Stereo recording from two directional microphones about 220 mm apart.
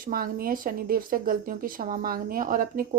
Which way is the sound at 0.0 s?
40° right (ahead or behind).